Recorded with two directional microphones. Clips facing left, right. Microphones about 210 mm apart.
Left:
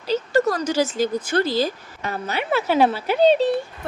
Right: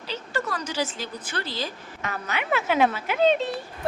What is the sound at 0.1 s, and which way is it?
Speech, 40° left (ahead or behind).